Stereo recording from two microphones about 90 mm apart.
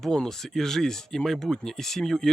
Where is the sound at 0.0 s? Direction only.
5° left (ahead or behind).